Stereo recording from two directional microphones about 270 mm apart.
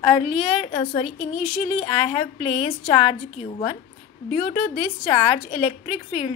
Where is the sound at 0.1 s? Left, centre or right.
Left.